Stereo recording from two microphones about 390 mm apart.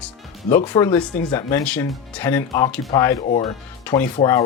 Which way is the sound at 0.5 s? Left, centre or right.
Centre.